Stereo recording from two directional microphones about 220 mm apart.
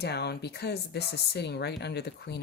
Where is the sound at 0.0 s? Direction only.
50° left (ahead or behind).